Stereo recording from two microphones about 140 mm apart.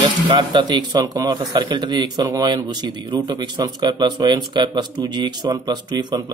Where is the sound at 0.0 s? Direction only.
35° right (ahead or behind).